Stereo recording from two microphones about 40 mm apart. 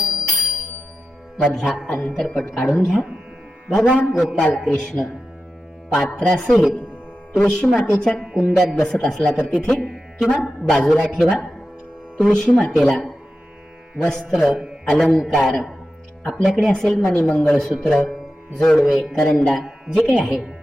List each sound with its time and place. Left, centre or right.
0.0 s music: centre
1.4 s speech: left
1.6 s a woman's voice: centre
6.1 s a woman's voice: centre
9.4 s speech: left
9.9 s music: centre
10.8 s a woman's voice: left